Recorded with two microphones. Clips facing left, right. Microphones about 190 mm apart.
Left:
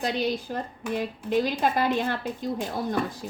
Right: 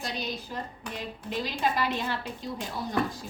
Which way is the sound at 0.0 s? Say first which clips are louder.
Left 8 dB; 55° left (ahead or behind).